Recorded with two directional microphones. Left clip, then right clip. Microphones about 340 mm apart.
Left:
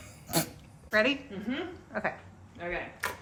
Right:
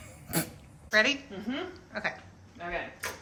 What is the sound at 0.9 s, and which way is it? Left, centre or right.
A woman's voice, centre.